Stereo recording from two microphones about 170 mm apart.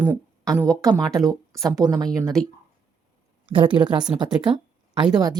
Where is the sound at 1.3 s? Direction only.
20° right (ahead or behind).